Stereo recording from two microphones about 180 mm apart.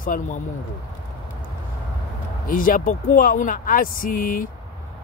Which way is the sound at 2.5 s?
50° left (ahead or behind).